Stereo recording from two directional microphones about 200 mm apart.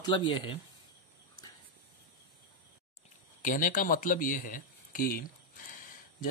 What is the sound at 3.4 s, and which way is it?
Speech, 40° left (ahead or behind).